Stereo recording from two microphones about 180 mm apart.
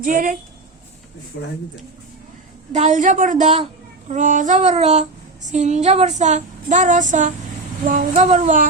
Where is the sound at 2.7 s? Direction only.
40° right (ahead or behind).